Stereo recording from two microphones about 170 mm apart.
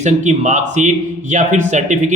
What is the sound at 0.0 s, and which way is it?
Speech, 45° right (ahead or behind).